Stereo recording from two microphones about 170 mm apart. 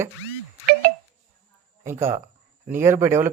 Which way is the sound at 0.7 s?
65° right (ahead or behind).